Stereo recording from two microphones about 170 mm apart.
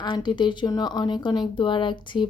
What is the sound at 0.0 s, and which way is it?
A woman's voice, 25° left (ahead or behind).